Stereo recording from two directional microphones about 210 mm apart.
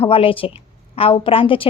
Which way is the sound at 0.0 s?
25° left (ahead or behind).